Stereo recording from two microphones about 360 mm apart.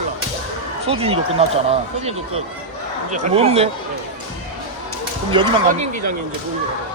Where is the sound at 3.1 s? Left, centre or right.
Centre.